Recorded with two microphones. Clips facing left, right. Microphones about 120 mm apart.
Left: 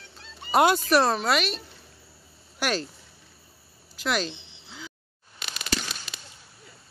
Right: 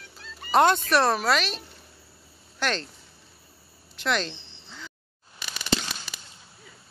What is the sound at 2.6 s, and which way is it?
Speech, 10° left (ahead or behind).